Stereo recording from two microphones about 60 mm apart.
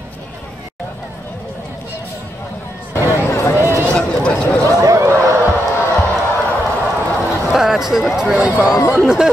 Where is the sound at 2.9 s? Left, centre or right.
Left.